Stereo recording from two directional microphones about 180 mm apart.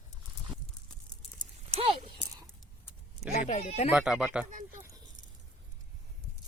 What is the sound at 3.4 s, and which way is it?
Speech, 40° left (ahead or behind).